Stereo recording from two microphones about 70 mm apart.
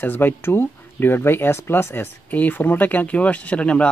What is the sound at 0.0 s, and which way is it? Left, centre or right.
Speech, left.